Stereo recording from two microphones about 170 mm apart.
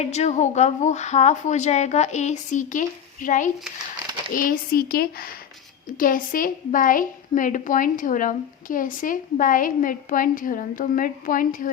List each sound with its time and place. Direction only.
0.0 s a woman's voice: 40° left (ahead or behind)